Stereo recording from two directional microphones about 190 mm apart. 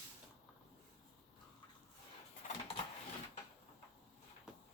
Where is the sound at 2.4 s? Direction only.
40° left (ahead or behind).